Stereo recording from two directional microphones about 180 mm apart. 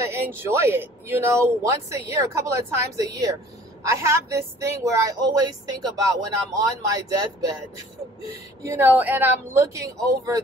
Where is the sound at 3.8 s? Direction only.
15° right (ahead or behind).